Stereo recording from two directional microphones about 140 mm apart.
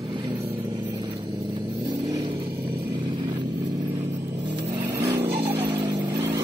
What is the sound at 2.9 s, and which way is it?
Vehicle, 35° right (ahead or behind).